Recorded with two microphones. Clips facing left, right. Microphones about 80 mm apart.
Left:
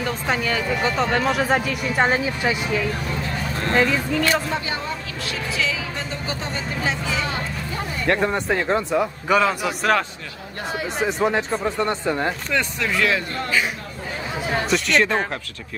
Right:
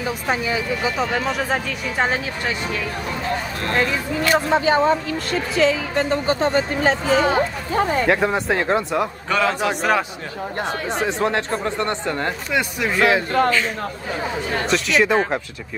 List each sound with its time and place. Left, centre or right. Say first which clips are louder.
0.0 s speech: right 1 dB; centre
4.2 s speech: right 4 dB; right
8.1 s speech: right 2 dB; centre
9.3 s speech: left 1 dB; centre
11.0 s speech: left 1 dB; centre
12.5 s speech: right 4 dB; centre
14.7 s speech: right 2 dB; centre